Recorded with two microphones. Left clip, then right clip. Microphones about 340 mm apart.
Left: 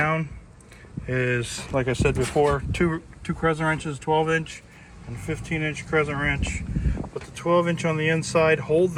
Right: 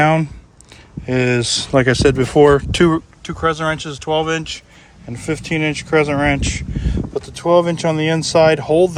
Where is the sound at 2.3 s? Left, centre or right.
Right.